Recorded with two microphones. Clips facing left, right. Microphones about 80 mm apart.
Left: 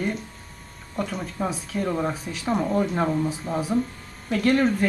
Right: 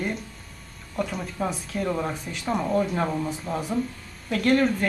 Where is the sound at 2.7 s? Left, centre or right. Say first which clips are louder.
Left 1 dB; centre.